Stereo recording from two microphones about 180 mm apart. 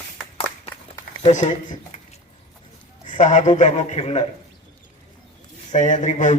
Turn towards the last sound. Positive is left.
turn(degrees=45)  # may be behind; listen again after turning